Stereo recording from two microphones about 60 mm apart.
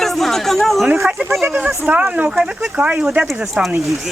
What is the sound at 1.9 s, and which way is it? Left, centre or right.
A woman's voice, centre.